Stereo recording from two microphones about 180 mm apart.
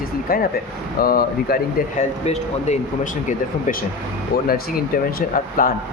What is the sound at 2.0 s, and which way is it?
Speech, 40° left (ahead or behind).